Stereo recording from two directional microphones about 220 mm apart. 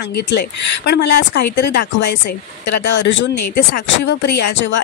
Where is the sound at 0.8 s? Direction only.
50° left (ahead or behind).